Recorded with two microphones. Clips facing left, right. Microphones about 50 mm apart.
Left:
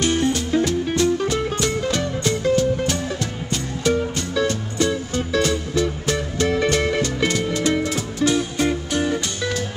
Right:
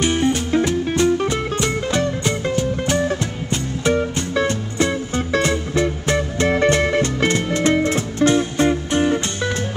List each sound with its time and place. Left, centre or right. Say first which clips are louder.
0.0 s music: right 2 dB; right